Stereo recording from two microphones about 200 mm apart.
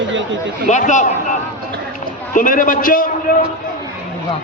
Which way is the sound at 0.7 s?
35° left (ahead or behind).